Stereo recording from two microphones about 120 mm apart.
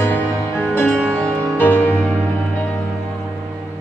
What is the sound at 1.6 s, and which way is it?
Music, 15° left (ahead or behind).